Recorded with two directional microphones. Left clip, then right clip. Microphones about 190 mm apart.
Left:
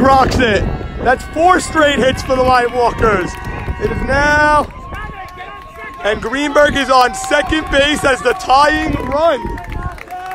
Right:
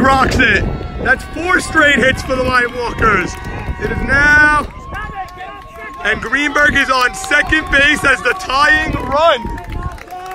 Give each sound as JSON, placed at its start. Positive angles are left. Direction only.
{"t": 0.0, "sound": "speech", "side_deg": 0}
{"t": 6.0, "sound": "speech", "side_deg": 10}